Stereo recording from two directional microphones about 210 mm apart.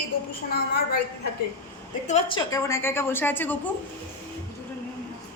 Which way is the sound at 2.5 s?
15° left (ahead or behind).